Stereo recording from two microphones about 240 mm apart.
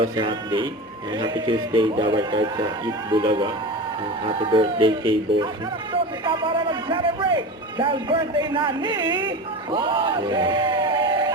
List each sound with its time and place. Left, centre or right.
0.0 s a man's voice: right